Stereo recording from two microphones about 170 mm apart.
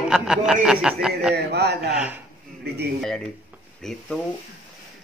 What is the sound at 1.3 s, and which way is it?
Speech, 75° right (ahead or behind).